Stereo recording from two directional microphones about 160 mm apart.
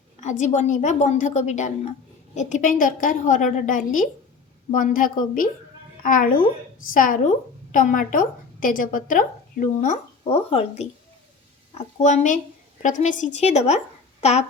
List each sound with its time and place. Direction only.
0.2 s a woman's voice: 50° left (ahead or behind)